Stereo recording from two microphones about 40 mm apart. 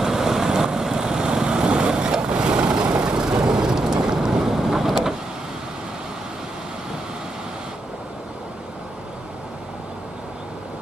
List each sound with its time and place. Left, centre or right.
0.0 s vehicle: centre